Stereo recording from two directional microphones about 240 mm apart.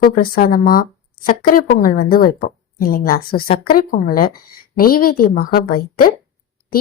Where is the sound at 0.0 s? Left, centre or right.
Left.